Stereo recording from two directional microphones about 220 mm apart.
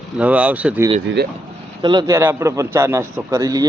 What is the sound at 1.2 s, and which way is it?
Speech, 50° right (ahead or behind).